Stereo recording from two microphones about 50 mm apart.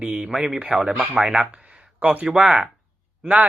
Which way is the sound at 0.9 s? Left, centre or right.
Right.